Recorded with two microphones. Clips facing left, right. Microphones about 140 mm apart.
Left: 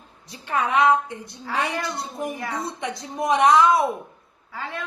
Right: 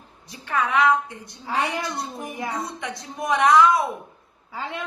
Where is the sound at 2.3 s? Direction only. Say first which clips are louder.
Right 1 dB; 20° right (ahead or behind).